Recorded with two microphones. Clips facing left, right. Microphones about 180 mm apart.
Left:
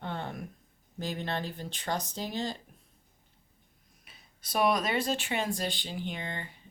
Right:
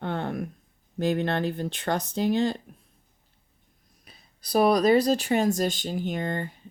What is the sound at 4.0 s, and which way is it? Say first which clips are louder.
Speech: right 4 dB; 35° right (ahead or behind).